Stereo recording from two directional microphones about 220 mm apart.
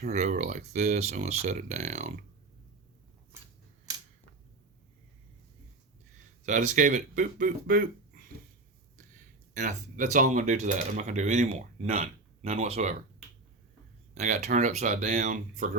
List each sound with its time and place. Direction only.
0.0 s speech: 35° right (ahead or behind)
6.4 s speech: 35° right (ahead or behind)
9.6 s speech: 35° right (ahead or behind)
14.2 s speech: 35° right (ahead or behind)